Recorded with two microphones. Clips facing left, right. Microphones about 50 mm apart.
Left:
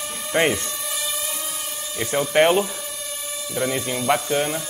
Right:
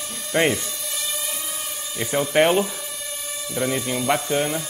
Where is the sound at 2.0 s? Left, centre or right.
Centre.